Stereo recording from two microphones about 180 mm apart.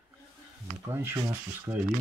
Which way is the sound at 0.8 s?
15° right (ahead or behind).